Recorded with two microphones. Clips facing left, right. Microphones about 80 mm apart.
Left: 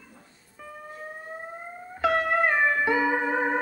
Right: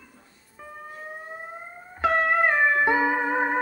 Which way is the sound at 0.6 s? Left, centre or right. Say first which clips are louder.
Even; right.